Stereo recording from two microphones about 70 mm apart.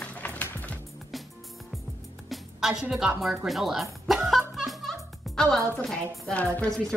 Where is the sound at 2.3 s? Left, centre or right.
Centre.